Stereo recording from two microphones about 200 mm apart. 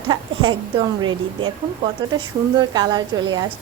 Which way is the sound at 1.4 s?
25° right (ahead or behind).